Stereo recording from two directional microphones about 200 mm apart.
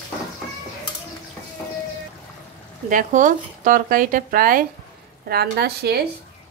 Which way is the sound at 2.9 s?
40° right (ahead or behind).